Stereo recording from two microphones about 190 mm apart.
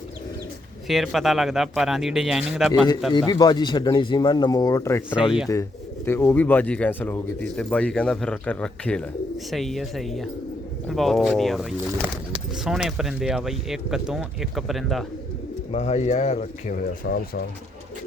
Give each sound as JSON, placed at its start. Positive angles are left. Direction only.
{"t": 0.9, "sound": "speech", "side_deg": 0}
{"t": 3.1, "sound": "speech", "side_deg": 20}
{"t": 15.7, "sound": "speech", "side_deg": 35}